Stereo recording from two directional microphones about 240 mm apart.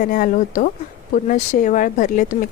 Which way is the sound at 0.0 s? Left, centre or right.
Left.